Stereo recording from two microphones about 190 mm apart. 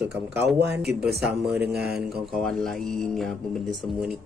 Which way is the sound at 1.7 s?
55° right (ahead or behind).